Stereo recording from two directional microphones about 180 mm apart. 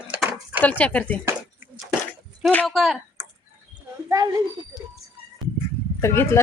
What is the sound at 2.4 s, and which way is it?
Speech, 5° left (ahead or behind).